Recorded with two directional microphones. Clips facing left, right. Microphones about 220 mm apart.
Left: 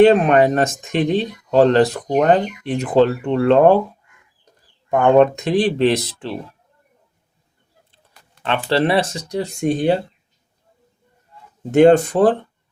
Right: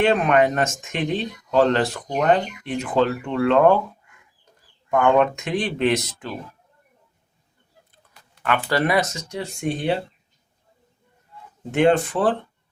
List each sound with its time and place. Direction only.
0.0 s speech: 35° left (ahead or behind)
4.9 s speech: 35° left (ahead or behind)
8.4 s speech: 25° left (ahead or behind)
11.7 s speech: 40° left (ahead or behind)